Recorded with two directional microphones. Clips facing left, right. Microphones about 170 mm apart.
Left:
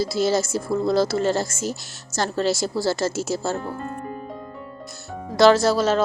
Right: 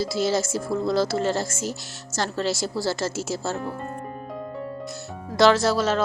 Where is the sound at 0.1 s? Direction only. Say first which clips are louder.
Left 2 dB; 45° left (ahead or behind).